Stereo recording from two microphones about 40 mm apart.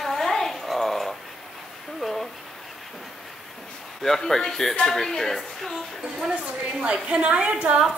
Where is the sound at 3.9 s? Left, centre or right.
Centre.